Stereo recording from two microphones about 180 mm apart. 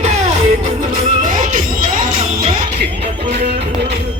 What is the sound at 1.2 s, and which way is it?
Music, 50° right (ahead or behind).